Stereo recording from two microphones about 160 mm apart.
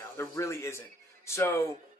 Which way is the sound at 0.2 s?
20° left (ahead or behind).